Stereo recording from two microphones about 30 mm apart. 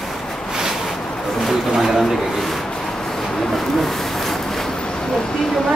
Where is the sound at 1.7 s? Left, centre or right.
Centre.